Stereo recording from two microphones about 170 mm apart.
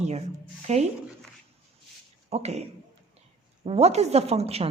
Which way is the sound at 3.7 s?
40° right (ahead or behind).